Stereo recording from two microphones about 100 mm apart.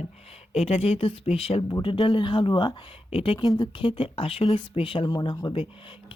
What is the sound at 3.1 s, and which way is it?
Speech, 75° left (ahead or behind).